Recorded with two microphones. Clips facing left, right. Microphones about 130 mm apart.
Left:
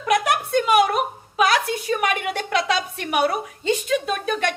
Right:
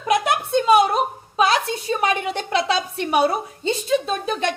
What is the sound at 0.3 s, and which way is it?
A woman's voice, 25° right (ahead or behind).